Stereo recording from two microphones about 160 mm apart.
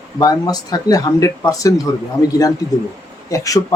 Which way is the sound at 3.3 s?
20° left (ahead or behind).